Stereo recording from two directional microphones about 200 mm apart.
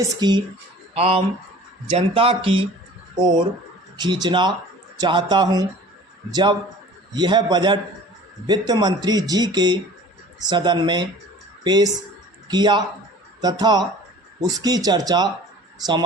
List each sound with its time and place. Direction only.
0.2 s speech: 20° right (ahead or behind)